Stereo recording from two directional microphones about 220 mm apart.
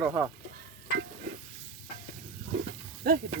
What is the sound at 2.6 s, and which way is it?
Snake, 40° right (ahead or behind).